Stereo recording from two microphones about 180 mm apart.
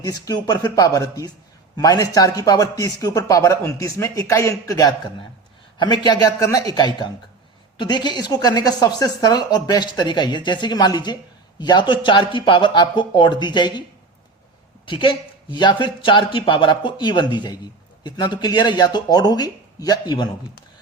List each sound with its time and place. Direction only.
0.0 s a man's voice: 20° left (ahead or behind)
14.8 s speech: 25° left (ahead or behind)